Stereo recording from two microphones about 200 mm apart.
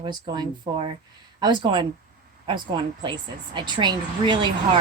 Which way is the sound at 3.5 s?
20° right (ahead or behind).